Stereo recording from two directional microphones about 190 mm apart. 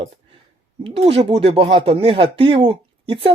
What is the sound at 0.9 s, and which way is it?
Speech, 30° right (ahead or behind).